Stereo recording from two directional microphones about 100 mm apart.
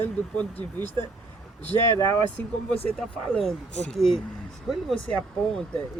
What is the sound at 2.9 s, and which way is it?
Speech, 5° left (ahead or behind).